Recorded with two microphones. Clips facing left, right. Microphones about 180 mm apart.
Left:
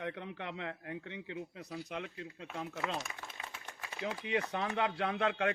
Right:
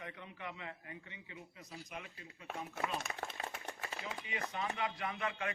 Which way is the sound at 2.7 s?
50° right (ahead or behind).